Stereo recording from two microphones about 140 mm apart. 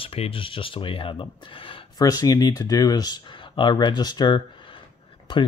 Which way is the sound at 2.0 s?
25° left (ahead or behind).